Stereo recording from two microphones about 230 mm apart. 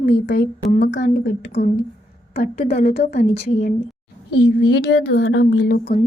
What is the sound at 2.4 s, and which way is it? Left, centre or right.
A woman's voice, left.